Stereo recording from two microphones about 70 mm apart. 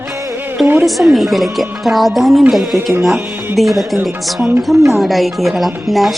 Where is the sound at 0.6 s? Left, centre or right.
Right.